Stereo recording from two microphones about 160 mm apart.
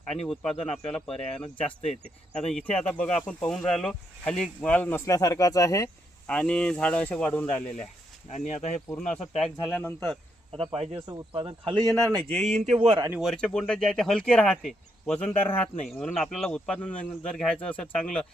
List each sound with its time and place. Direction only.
0.1 s speech: 5° left (ahead or behind); by 5.9 s 20° left (ahead or behind)
6.2 s speech: 5° left (ahead or behind)
8.3 s speech: 45° left (ahead or behind)
9.0 s speech: 5° left (ahead or behind)
11.3 s speech: 35° right (ahead or behind)
12.3 s speech: 45° right (ahead or behind)
13.1 s speech: 5° right (ahead or behind)
13.3 s speech: 5° left (ahead or behind)